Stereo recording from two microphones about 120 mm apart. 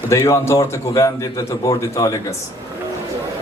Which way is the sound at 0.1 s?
25° left (ahead or behind).